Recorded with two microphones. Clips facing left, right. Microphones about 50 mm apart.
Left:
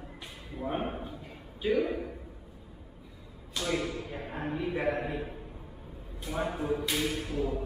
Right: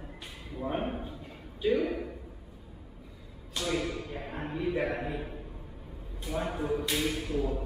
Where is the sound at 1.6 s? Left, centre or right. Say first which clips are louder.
Even; centre.